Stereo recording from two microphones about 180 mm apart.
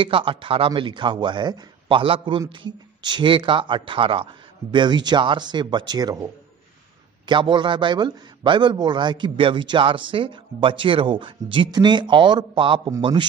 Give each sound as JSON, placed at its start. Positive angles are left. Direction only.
{"t": 0.0, "sound": "speech", "side_deg": -30}
{"t": 7.2, "sound": "speech", "side_deg": -25}